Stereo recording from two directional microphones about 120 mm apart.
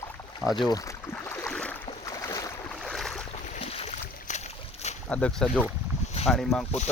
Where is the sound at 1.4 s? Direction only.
10° left (ahead or behind).